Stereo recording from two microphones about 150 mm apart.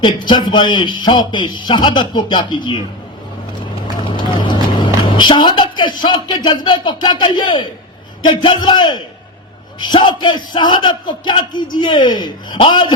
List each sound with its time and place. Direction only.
0.0 s a man's voice: 30° left (ahead or behind)
4.4 s music: 30° left (ahead or behind)
6.0 s a man's voice: 30° left (ahead or behind)